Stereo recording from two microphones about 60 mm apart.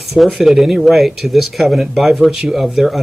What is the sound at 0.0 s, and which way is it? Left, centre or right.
Speech, centre.